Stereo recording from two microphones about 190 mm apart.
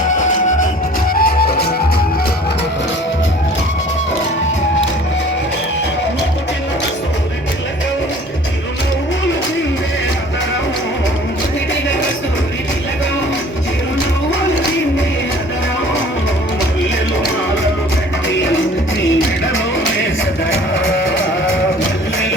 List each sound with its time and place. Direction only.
0.1 s music: 40° left (ahead or behind)
1.1 s music: 55° left (ahead or behind)
18.3 s music: 75° left (ahead or behind)
20.5 s music: 80° left